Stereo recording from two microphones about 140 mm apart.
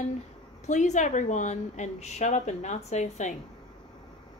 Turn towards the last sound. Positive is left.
turn(degrees=55)  # may be behind; listen again after turning